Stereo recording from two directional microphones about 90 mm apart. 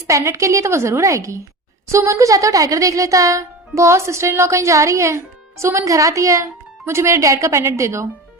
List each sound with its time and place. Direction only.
0.1 s speech: 35° right (ahead or behind)